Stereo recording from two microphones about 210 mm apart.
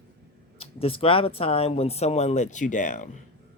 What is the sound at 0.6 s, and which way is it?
Speech, 25° left (ahead or behind).